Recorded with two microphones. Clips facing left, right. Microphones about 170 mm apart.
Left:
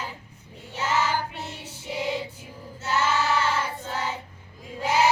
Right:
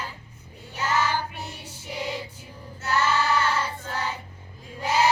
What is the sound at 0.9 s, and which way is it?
Child singing, 10° left (ahead or behind).